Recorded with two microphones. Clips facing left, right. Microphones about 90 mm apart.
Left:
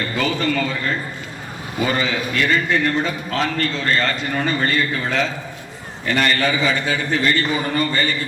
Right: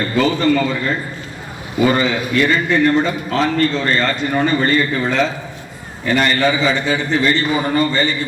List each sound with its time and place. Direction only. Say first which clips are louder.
0.2 s a man's voice: right 6 dB; 35° right (ahead or behind)